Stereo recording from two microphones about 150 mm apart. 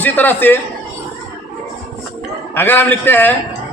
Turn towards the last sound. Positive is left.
turn(degrees=15)  # may be behind; listen again after turning